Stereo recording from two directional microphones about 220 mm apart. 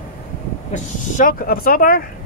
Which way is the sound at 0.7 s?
40° left (ahead or behind).